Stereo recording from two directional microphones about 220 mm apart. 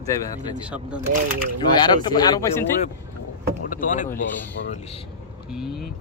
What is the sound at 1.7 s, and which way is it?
Speech, 20° left (ahead or behind).